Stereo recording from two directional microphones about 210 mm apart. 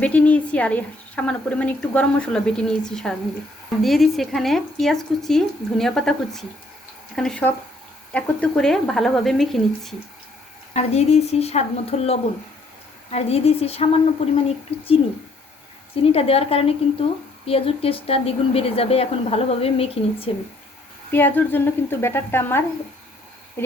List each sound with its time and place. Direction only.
0.0 s a woman's voice: 5° left (ahead or behind)
10.8 s a woman's voice: 30° left (ahead or behind)
16.0 s a woman's voice: 30° left (ahead or behind)
21.1 s a woman's voice: 10° left (ahead or behind)
23.6 s a sound: 10° left (ahead or behind)